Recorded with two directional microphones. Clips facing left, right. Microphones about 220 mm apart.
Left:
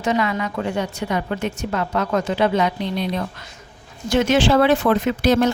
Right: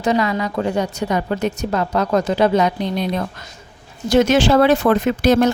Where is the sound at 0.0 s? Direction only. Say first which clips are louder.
Right 3 dB; 35° right (ahead or behind).